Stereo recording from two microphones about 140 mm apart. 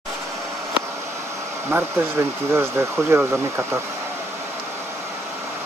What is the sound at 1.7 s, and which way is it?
Speech, 15° right (ahead or behind).